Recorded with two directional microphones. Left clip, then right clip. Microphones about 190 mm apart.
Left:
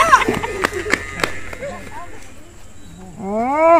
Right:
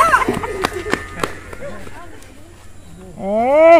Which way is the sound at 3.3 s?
55° right (ahead or behind).